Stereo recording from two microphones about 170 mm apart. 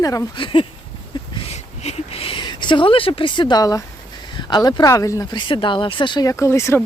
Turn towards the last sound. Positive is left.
turn(degrees=15)  # may be behind; listen again after turning